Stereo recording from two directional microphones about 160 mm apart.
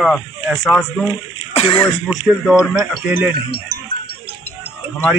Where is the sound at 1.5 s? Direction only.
35° left (ahead or behind).